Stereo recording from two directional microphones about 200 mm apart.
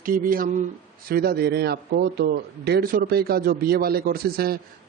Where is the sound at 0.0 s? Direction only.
45° right (ahead or behind).